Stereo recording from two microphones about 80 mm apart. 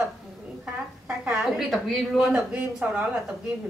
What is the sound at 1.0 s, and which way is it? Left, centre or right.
A woman's voice, centre.